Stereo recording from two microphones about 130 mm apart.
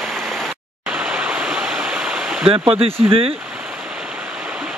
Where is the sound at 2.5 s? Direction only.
45° right (ahead or behind).